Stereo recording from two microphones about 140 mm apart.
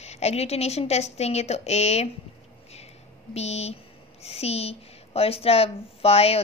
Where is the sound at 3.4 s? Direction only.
50° left (ahead or behind).